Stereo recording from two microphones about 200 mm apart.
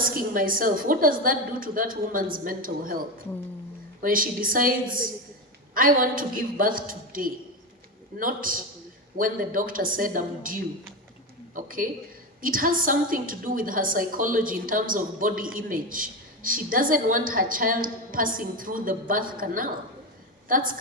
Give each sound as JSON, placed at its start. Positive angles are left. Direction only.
{"t": 0.0, "sound": "a woman's voice", "side_deg": -45}
{"t": 4.0, "sound": "a woman's voice", "side_deg": -45}